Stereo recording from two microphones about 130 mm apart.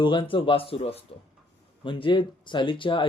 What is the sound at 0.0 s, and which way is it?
Speech, 40° left (ahead or behind).